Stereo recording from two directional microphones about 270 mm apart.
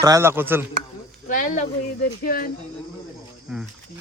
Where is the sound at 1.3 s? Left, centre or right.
Left.